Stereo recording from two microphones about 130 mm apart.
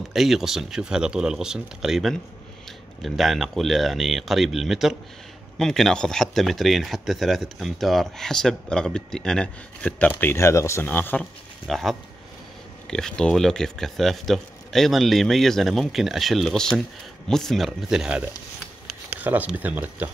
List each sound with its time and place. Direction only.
0.1 s speech: centre (ahead or behind); by 11.2 s 15° left (ahead or behind)
11.6 s speech: centre (ahead or behind)